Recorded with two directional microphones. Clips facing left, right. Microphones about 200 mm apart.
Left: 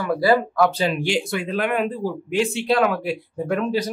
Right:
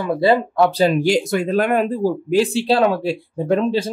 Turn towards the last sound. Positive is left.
turn(degrees=-30)  # may be behind; listen again after turning